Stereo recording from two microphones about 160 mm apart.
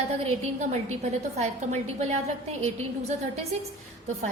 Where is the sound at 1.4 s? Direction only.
45° right (ahead or behind).